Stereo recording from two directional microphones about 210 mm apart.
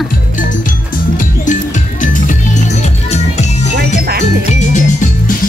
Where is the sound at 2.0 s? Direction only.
40° left (ahead or behind).